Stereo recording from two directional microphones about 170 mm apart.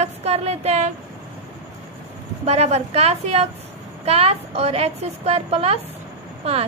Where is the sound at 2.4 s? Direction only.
40° right (ahead or behind).